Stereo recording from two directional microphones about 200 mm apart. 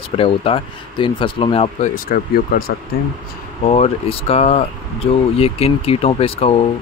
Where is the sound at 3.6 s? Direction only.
30° left (ahead or behind).